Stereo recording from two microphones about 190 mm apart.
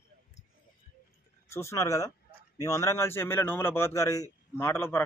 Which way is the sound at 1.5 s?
15° left (ahead or behind).